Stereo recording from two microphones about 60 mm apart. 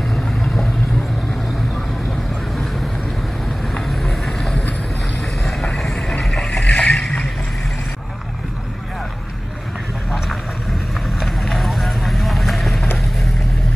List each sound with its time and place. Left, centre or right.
0.1 s vehicle: centre
3.7 s boat: centre
5.8 s vehicle: centre
6.6 s boat: left
6.9 s vehicle: centre
11.2 s vehicle: centre